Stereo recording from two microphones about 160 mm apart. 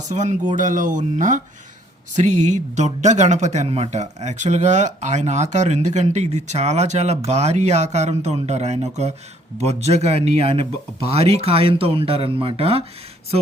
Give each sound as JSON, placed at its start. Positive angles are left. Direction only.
{"t": 0.1, "sound": "speech", "side_deg": -50}